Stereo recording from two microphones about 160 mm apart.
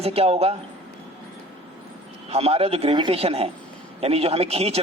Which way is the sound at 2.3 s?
40° right (ahead or behind).